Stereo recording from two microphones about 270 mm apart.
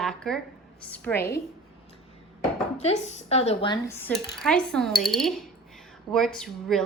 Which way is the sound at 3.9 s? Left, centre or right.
Centre.